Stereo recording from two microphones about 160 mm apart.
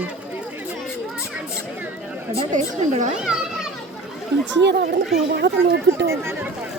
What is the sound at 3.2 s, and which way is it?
Speech, 5° right (ahead or behind).